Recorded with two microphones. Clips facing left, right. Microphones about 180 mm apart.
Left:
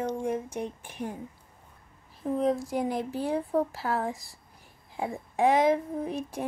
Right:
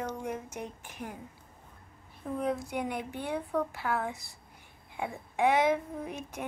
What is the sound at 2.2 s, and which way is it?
Speech, 35° left (ahead or behind).